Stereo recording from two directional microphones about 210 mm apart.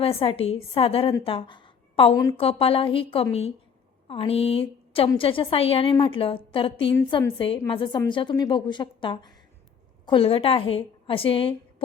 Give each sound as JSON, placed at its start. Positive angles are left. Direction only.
{"t": 0.0, "sound": "a woman's voice", "side_deg": 25}
{"t": 1.2, "sound": "a sound", "side_deg": 25}
{"t": 2.1, "sound": "a woman's voice", "side_deg": 20}